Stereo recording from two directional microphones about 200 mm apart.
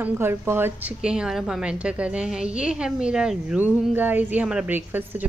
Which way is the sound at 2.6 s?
5° right (ahead or behind).